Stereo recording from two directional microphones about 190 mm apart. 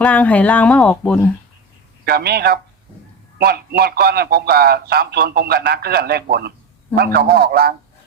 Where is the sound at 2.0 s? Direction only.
55° right (ahead or behind).